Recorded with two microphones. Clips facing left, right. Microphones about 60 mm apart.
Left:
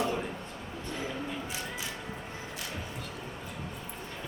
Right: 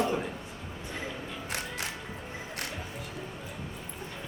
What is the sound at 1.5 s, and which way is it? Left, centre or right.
Music, right.